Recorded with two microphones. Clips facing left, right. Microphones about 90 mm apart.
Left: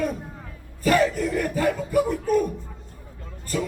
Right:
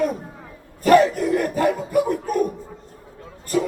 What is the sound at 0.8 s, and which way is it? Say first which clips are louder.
Speech: right 6 dB; 40° right (ahead or behind).